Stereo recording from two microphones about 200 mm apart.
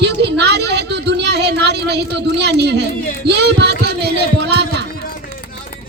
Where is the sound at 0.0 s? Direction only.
55° right (ahead or behind).